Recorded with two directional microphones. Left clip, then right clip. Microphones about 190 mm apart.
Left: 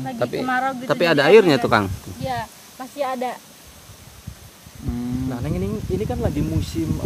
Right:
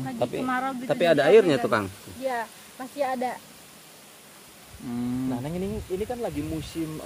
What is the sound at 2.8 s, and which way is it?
Speech, 20° left (ahead or behind).